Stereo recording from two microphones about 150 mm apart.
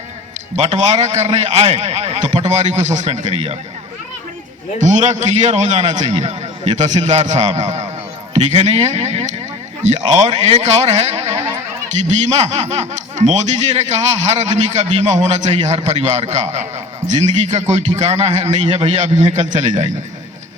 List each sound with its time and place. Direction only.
0.5 s a man's voice: 50° right (ahead or behind)
4.8 s a man's voice: 55° right (ahead or behind)
11.3 s a sound: 20° right (ahead or behind)
11.9 s a man's voice: 55° right (ahead or behind)